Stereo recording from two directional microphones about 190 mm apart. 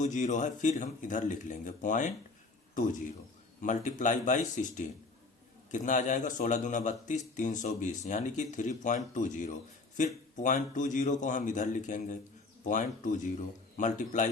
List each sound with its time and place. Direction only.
0.0 s a man's voice: 40° left (ahead or behind)
3.6 s a man's voice: 40° left (ahead or behind)